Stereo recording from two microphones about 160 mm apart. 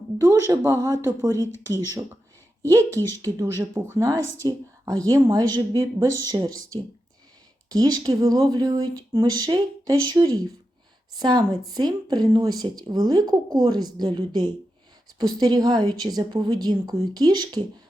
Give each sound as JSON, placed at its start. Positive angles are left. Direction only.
{"t": 0.2, "sound": "speech", "side_deg": -15}
{"t": 2.6, "sound": "speech", "side_deg": -20}
{"t": 7.7, "sound": "speech", "side_deg": -20}